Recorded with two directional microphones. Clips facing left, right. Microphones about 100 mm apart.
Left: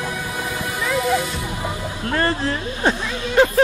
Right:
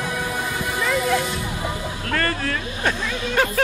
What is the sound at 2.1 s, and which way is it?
Speech, 25° left (ahead or behind).